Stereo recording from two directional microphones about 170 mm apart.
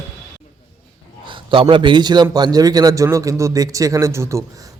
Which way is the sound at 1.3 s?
30° right (ahead or behind).